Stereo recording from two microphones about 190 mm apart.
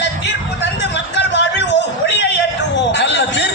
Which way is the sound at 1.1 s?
70° left (ahead or behind).